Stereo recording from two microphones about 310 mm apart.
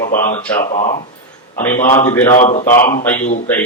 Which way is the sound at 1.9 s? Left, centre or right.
Centre.